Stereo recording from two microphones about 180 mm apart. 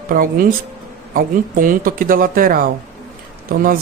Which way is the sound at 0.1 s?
50° right (ahead or behind).